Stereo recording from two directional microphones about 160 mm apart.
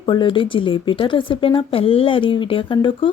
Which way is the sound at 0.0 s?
30° left (ahead or behind).